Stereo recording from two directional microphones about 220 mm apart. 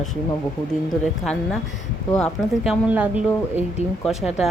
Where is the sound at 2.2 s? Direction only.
Centre (ahead or behind).